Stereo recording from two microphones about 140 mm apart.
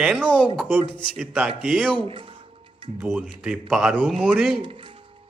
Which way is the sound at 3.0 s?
5° right (ahead or behind).